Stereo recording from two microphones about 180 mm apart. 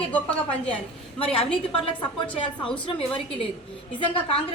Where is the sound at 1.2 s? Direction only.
30° left (ahead or behind).